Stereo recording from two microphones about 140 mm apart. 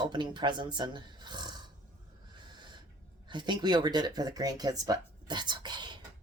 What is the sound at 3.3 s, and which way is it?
Speech, 35° right (ahead or behind).